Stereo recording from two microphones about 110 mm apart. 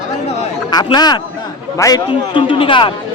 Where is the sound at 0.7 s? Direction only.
40° left (ahead or behind).